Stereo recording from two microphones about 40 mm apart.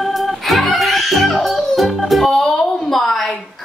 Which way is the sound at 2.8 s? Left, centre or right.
Centre.